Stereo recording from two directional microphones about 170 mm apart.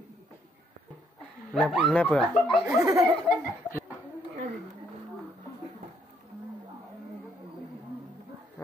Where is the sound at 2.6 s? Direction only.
20° right (ahead or behind).